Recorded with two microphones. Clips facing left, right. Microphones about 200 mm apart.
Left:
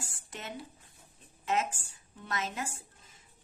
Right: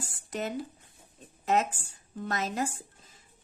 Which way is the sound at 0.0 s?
40° right (ahead or behind).